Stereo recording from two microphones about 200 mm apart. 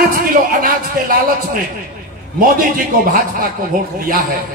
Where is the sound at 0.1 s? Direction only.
45° right (ahead or behind).